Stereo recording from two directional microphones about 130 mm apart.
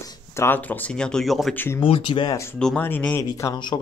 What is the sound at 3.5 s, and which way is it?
Speech, 35° left (ahead or behind).